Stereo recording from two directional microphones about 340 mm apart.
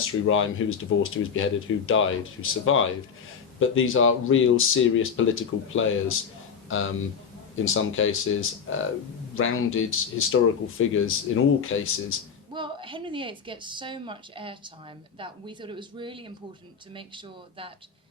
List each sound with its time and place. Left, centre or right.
0.0 s speech: left
12.5 s speech: centre